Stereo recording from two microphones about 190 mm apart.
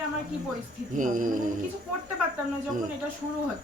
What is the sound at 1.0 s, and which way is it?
Speech, 45° right (ahead or behind).